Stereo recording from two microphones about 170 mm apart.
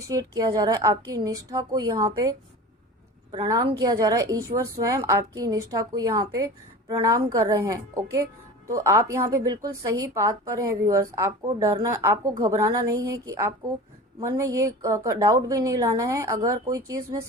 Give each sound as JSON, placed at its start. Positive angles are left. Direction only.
{"t": 0.1, "sound": "a woman's voice", "side_deg": -20}
{"t": 3.3, "sound": "a woman's voice", "side_deg": -25}